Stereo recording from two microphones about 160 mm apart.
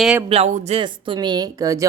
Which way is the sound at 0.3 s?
40° right (ahead or behind).